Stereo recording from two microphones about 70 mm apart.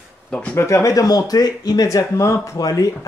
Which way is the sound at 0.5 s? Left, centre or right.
Left.